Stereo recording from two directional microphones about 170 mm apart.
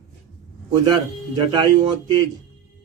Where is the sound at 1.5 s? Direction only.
25° right (ahead or behind).